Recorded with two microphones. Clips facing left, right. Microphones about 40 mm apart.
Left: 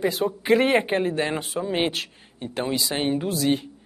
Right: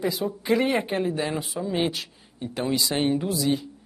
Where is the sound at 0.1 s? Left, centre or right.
Left.